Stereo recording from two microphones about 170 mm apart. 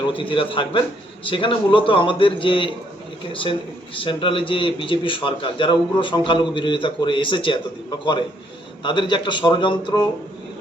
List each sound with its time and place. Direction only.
0.1 s a man's voice: 30° left (ahead or behind)
3.9 s a man's voice: 30° left (ahead or behind)
8.8 s a man's voice: 30° left (ahead or behind)